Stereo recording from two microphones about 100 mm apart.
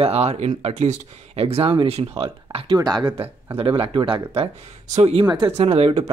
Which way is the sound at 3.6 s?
65° right (ahead or behind).